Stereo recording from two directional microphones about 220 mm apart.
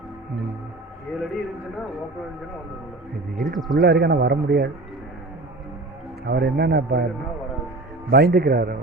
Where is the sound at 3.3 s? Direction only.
Centre (ahead or behind).